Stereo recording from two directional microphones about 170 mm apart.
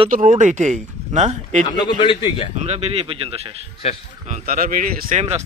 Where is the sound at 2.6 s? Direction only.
40° right (ahead or behind).